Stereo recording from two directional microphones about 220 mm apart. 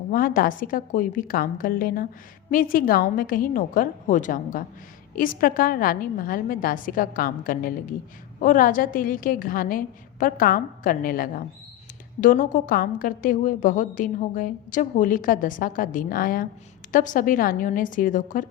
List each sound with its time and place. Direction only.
0.1 s a woman's voice: 40° left (ahead or behind)